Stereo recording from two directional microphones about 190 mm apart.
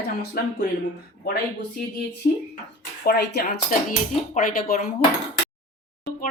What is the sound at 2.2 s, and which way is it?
A woman's voice, 55° left (ahead or behind).